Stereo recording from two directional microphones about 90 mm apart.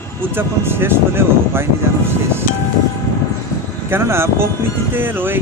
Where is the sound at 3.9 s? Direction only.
25° right (ahead or behind).